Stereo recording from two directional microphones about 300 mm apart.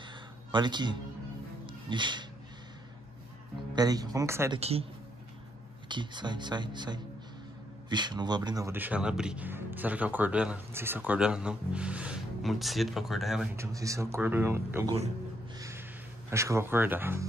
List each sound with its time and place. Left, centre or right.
0.0 s a sound: centre
1.7 s music: centre
3.7 s speech: centre
4.6 s speech: right
5.9 s speech: centre
15.5 s music: centre
16.3 s speech: centre